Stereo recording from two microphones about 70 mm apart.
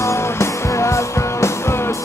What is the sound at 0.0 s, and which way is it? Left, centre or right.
Music, left.